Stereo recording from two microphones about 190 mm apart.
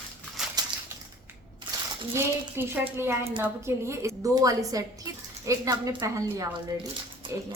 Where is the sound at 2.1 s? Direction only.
15° right (ahead or behind).